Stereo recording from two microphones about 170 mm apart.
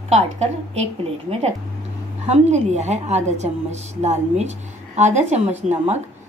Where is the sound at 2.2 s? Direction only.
40° right (ahead or behind).